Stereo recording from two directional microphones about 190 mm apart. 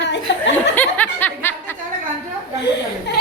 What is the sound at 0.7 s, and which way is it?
Snicker, 10° left (ahead or behind).